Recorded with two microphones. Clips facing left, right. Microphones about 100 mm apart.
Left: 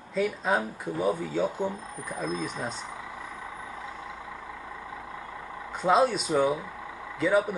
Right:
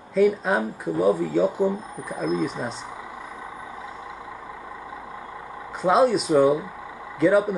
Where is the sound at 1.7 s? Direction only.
15° right (ahead or behind).